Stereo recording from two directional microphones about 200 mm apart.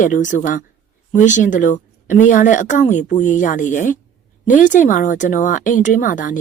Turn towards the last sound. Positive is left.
turn(degrees=40)  # may be behind; listen again after turning